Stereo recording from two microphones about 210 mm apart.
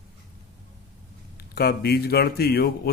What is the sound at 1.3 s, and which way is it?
Speech, 50° left (ahead or behind).